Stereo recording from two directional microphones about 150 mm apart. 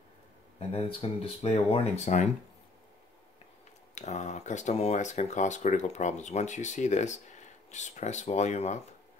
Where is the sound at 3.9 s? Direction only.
50° left (ahead or behind).